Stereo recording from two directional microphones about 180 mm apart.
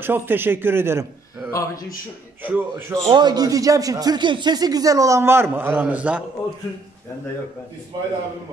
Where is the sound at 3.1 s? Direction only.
25° right (ahead or behind); by 6.2 s 10° right (ahead or behind).